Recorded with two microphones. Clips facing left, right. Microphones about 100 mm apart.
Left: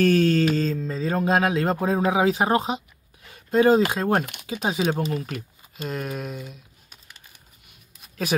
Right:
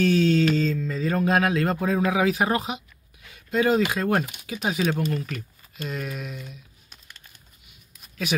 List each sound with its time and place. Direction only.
0.0 s mantra: 45° left (ahead or behind)
0.6 s speech: 35° left (ahead or behind)
4.2 s speech: 60° left (ahead or behind)
4.5 s speech: 25° left (ahead or behind)
5.9 s speech: 40° left (ahead or behind)
6.9 s a sound: 10° left (ahead or behind)